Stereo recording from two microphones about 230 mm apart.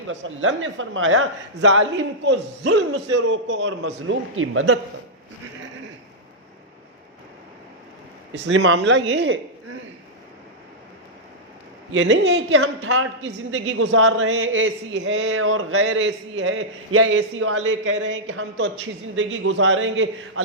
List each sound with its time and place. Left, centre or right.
0.1 s a man's voice: right
8.3 s a man's voice: right
11.9 s a man's voice: right
12.5 s speech: right
15.3 s speech: right